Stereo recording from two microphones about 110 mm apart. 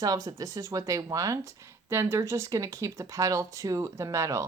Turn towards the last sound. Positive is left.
turn(degrees=-30)  # may be behind; listen again after turning